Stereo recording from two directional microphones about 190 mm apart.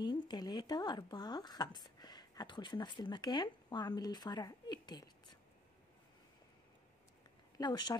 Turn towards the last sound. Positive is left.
turn(degrees=20)  # may be behind; listen again after turning